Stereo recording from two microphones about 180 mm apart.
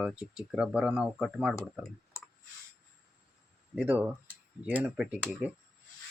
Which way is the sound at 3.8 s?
10° right (ahead or behind).